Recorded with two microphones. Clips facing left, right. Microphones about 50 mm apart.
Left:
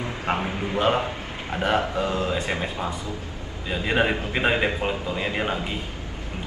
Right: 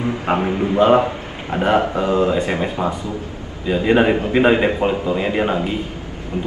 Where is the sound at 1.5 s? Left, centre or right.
Right.